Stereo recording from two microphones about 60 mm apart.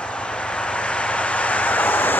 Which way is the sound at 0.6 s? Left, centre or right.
Centre.